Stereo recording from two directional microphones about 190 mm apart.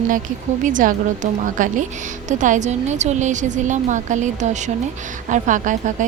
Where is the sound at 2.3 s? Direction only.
40° right (ahead or behind).